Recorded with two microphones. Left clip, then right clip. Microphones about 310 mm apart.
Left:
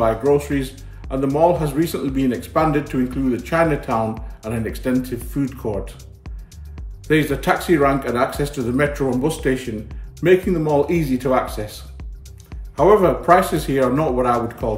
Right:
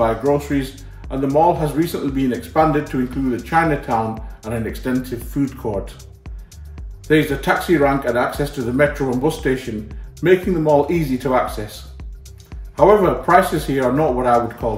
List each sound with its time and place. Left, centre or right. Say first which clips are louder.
0.0 s speech: even; centre
7.1 s speech: right 1 dB; centre
12.4 s speech: right 2 dB; centre